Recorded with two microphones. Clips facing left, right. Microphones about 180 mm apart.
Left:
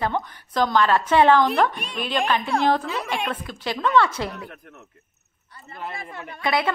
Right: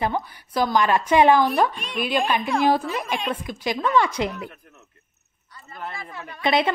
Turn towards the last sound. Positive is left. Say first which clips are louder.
# right 2 dB
turn(degrees=-20)  # may be behind; listen again after turning